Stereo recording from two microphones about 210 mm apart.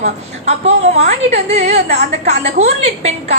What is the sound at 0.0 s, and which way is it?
A woman's voice, 30° right (ahead or behind).